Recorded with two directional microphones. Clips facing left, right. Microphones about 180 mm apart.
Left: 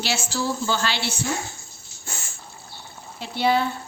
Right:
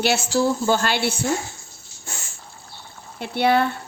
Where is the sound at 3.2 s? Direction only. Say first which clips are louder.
Right 3 dB; 60° right (ahead or behind).